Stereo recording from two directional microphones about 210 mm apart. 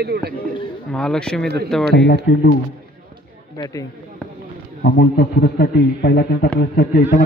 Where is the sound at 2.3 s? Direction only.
55° left (ahead or behind).